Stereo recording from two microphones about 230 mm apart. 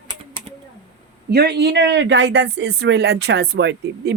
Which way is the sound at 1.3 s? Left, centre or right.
Right.